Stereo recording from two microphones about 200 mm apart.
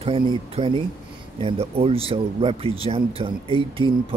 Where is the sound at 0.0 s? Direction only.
30° right (ahead or behind).